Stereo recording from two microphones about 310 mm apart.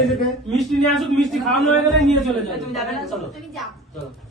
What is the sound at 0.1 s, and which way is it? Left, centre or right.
A man's voice, centre.